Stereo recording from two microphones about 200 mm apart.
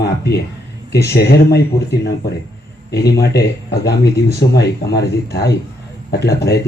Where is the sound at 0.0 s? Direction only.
55° left (ahead or behind).